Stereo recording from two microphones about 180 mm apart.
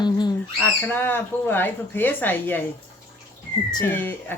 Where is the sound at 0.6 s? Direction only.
10° left (ahead or behind).